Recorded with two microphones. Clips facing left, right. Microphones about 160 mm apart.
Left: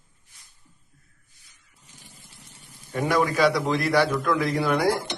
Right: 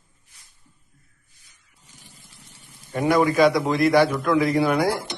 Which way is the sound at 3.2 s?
15° right (ahead or behind).